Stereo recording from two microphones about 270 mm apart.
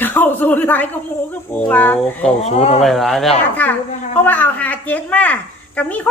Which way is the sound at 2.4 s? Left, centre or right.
Left.